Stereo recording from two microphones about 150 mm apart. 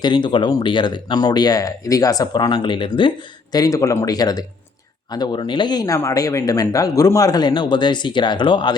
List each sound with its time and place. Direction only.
0.0 s speech: 30° left (ahead or behind)
3.5 s speech: 25° left (ahead or behind)